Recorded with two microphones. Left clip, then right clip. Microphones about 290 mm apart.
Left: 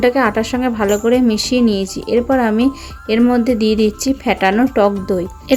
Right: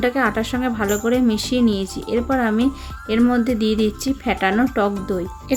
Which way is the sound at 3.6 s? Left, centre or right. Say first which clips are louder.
Left 5 dB; right.